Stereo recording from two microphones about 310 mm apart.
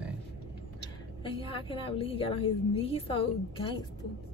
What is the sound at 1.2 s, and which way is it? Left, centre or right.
A woman's voice, centre.